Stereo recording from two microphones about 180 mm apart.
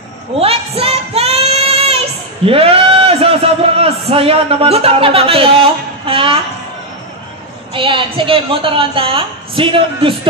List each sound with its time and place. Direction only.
0.4 s child singing: 35° right (ahead or behind)
6.0 s speech: 30° right (ahead or behind)
7.7 s a woman's voice: 30° right (ahead or behind)